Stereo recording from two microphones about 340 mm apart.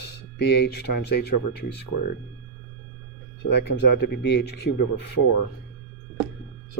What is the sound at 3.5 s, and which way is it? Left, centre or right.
Speech, left.